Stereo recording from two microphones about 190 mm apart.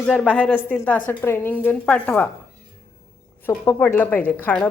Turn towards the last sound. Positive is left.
turn(degrees=10)  # may be behind; listen again after turning